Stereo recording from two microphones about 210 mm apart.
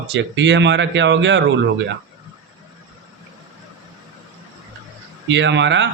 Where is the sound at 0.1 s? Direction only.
60° right (ahead or behind).